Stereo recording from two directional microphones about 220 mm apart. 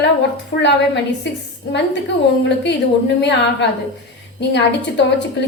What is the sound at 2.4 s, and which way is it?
Speech, 50° left (ahead or behind).